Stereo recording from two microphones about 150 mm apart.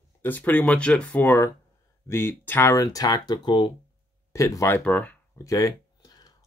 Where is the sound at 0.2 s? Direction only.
10° left (ahead or behind); by 3.7 s 30° left (ahead or behind).